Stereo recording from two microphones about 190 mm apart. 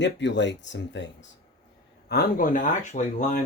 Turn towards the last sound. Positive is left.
turn(degrees=40)  # may be behind; listen again after turning